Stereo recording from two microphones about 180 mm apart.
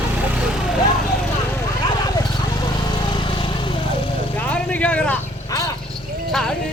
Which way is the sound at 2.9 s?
25° left (ahead or behind).